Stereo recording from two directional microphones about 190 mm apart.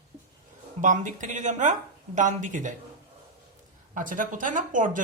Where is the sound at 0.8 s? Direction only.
40° right (ahead or behind).